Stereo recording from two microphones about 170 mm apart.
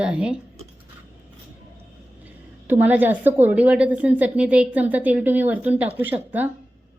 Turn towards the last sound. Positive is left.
turn(degrees=-10)  # may be behind; listen again after turning